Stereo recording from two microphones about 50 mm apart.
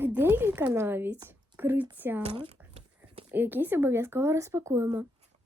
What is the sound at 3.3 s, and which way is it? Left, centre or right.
Speech, right.